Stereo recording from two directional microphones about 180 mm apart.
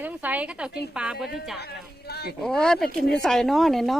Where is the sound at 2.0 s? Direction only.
60° left (ahead or behind).